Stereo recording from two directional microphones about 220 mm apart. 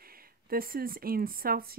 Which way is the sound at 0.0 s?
40° right (ahead or behind).